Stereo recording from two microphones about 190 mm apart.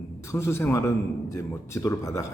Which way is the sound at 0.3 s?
15° left (ahead or behind).